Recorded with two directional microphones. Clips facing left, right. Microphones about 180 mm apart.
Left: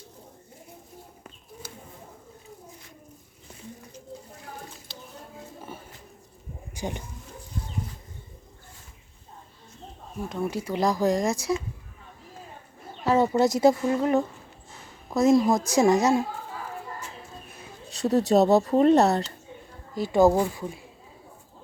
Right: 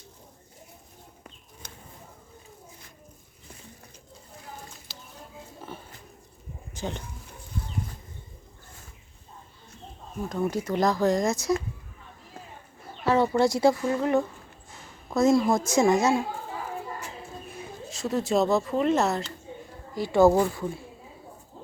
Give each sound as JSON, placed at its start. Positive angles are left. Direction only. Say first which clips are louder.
{"t": 5.7, "sound": "pig", "louder": "right 2 dB", "side_deg": 10}
{"t": 6.7, "sound": "speech", "louder": "left 1 dB", "side_deg": 10}
{"t": 10.2, "sound": "speech", "louder": "right 2 dB", "side_deg": 5}
{"t": 11.3, "sound": "speech", "louder": "right 1 dB", "side_deg": 30}
{"t": 13.1, "sound": "a sound", "louder": "left 1 dB", "side_deg": 15}
{"t": 13.5, "sound": "speech", "louder": "left 2 dB", "side_deg": 20}
{"t": 17.9, "sound": "speech", "louder": "left 5 dB", "side_deg": 35}
{"t": 20.0, "sound": "speech", "louder": "even", "side_deg": 15}